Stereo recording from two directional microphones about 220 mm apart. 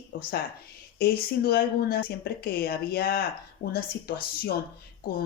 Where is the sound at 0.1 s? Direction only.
40° left (ahead or behind).